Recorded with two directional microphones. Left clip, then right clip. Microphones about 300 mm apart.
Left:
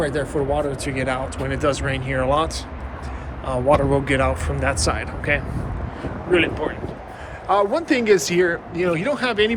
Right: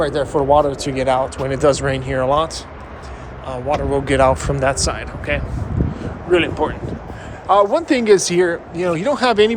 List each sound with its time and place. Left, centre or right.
0.0 s speech: centre